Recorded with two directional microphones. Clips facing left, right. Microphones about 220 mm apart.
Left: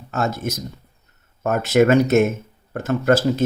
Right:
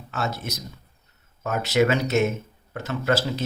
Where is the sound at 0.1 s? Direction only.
45° left (ahead or behind).